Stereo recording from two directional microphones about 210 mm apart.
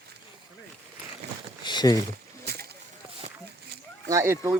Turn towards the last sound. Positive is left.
turn(degrees=-10)  # may be behind; listen again after turning